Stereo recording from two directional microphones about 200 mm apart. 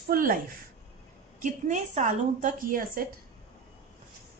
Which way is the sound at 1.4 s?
40° right (ahead or behind).